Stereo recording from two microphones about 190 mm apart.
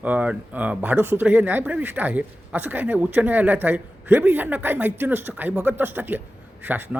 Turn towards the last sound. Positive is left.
turn(degrees=-10)  # may be behind; listen again after turning